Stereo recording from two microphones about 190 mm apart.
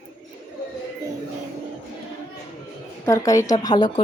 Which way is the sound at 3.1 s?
15° left (ahead or behind).